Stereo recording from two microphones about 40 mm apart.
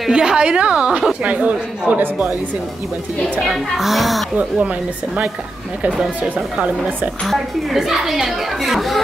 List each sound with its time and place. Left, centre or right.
0.1 s a woman's voice: right
1.3 s a man's voice: right
3.4 s speech: centre
7.2 s speech: centre